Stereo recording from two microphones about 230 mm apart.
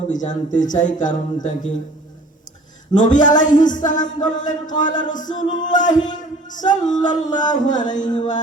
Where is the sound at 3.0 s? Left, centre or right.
Left.